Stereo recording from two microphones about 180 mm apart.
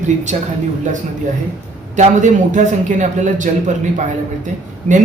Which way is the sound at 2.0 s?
45° right (ahead or behind).